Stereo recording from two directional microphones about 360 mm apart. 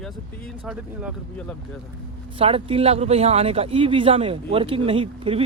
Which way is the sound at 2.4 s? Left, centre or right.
Centre.